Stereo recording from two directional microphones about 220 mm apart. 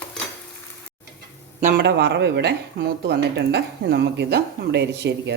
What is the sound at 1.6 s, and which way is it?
Speech, 45° right (ahead or behind).